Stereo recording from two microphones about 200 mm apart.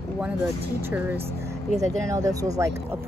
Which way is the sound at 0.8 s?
10° right (ahead or behind).